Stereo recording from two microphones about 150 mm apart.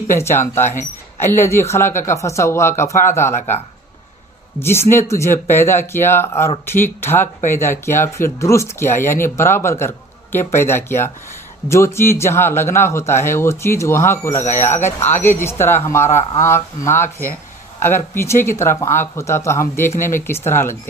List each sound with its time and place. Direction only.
0.1 s speech: 15° left (ahead or behind)
4.6 s speech: 15° left (ahead or behind)
16.1 s speech: 50° left (ahead or behind)
16.4 s speech: 15° left (ahead or behind)